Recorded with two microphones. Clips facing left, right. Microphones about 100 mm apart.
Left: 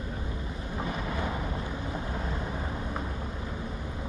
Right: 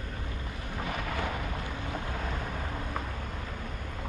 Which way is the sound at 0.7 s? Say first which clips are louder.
Left 1 dB; 15° left (ahead or behind).